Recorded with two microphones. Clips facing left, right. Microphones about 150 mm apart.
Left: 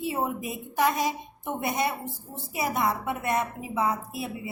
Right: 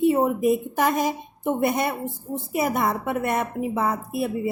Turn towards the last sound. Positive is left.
turn(degrees=-55)  # may be behind; listen again after turning